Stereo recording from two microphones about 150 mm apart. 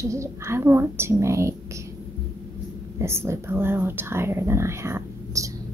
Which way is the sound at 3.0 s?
20° right (ahead or behind).